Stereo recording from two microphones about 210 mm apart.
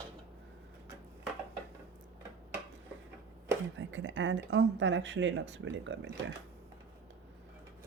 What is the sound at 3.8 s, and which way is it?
Speech, 60° right (ahead or behind).